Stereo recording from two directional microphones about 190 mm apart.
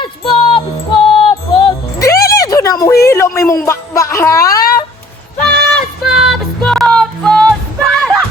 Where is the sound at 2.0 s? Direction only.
15° left (ahead or behind).